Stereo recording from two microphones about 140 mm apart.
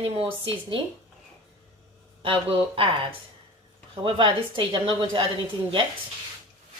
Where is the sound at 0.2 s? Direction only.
40° right (ahead or behind).